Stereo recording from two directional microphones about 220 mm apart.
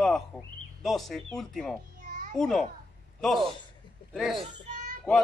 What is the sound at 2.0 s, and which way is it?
Children playing, 35° right (ahead or behind).